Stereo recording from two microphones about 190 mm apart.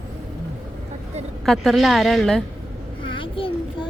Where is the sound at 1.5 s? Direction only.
Centre (ahead or behind).